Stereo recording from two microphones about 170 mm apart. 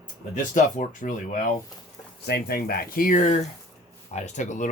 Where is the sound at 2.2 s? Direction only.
65° left (ahead or behind).